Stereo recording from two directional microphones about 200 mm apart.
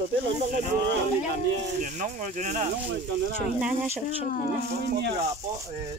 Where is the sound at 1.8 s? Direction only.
40° right (ahead or behind).